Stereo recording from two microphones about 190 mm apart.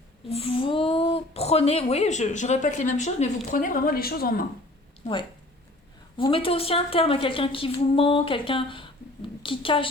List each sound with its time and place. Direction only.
0.3 s speech: 30° left (ahead or behind); by 4.4 s 50° left (ahead or behind)
6.1 s a woman's voice: 25° left (ahead or behind)